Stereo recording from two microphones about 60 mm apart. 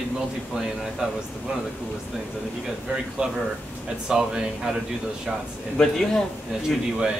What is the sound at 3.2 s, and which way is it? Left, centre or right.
Speech, centre.